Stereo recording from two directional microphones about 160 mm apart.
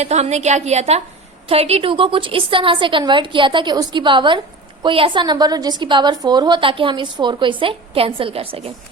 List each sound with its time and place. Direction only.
0.0 s a woman's voice: 45° right (ahead or behind)